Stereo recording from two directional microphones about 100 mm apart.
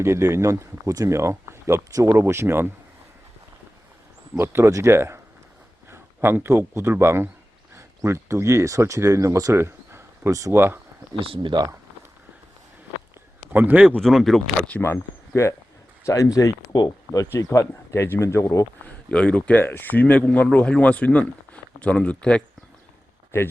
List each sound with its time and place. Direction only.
0.0 s speech: 25° right (ahead or behind)
4.4 s a man's voice: 25° right (ahead or behind)
11.2 s speech: 65° right (ahead or behind)
13.5 s a man's voice: 20° right (ahead or behind)
14.0 s speech: centre (ahead or behind)
15.4 s speech: 30° left (ahead or behind)
17.3 s speech: 30° left (ahead or behind)
19.0 s speech: 10° left (ahead or behind)